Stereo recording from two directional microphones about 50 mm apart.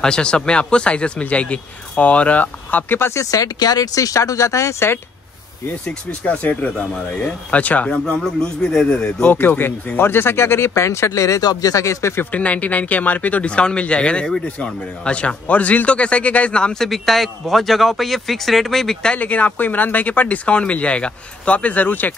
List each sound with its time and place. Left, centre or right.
0.0 s a man's voice: centre
3.0 s speech: left
4.1 s speech: left
6.3 s a man's voice: left
8.2 s speech: centre
9.2 s speech: left
12.3 s a man's voice: left; by 18.9 s centre
19.1 s speech: left